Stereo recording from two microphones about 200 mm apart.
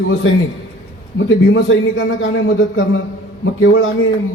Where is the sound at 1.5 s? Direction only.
70° left (ahead or behind).